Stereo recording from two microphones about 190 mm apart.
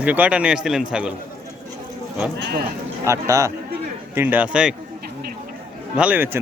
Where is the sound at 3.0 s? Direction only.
15° right (ahead or behind).